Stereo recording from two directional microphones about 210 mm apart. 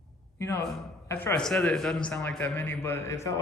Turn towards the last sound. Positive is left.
turn(degrees=10)  # may be behind; listen again after turning